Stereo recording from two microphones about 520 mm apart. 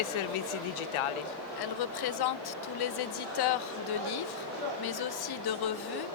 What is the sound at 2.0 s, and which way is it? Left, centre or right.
Speech, left.